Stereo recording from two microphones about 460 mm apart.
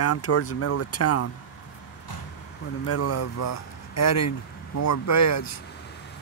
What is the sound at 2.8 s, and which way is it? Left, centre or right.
Speech, left.